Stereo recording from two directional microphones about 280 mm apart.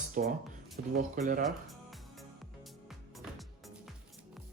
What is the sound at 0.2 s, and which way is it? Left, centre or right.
Speech, right.